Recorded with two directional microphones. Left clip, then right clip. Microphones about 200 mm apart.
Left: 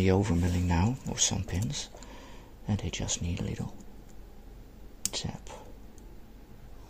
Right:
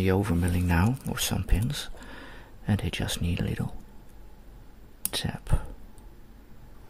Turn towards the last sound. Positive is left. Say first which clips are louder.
# right 5 dB
turn(degrees=-20)  # may be behind; listen again after turning